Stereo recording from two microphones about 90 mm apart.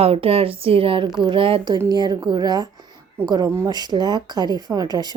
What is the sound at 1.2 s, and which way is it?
Speech, 65° right (ahead or behind).